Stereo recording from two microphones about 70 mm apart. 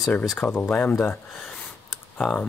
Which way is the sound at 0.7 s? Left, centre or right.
Left.